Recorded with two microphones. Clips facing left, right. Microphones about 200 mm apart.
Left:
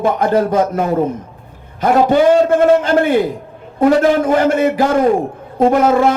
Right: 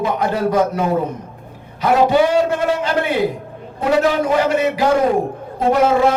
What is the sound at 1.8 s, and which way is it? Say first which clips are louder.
A man's voice: left 3 dB; 50° left (ahead or behind).